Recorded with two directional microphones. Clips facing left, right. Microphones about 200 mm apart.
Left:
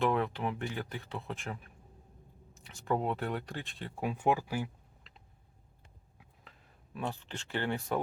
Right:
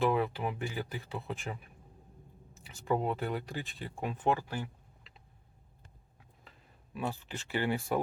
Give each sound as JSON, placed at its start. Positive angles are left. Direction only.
{"t": 0.0, "sound": "speech", "side_deg": -5}
{"t": 5.1, "sound": "a sound", "side_deg": 0}
{"t": 6.9, "sound": "speech", "side_deg": -5}